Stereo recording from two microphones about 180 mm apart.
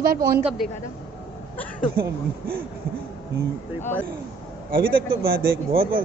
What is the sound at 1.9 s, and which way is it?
Speech, 55° right (ahead or behind).